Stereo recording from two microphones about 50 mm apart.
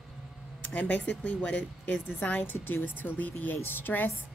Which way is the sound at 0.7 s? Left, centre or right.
Left.